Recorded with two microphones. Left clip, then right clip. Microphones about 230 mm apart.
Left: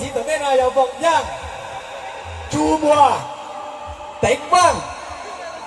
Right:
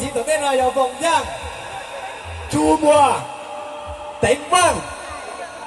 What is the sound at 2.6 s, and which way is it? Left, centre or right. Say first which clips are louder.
Speech: even; right.